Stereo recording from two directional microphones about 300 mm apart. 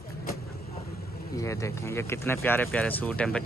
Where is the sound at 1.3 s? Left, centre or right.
Centre.